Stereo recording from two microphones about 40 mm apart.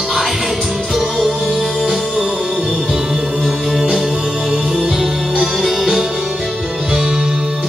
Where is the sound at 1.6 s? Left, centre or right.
Centre.